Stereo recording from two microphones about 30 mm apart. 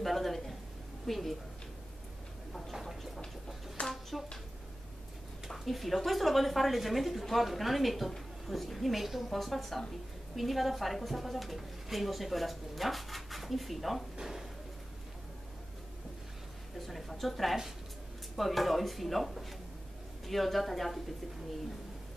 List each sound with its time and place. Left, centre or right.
0.0 s a sound: centre
1.0 s a woman's voice: centre
3.8 s hands: left
5.7 s a woman's voice: centre
14.1 s drawer open or close: centre
16.7 s a woman's voice: centre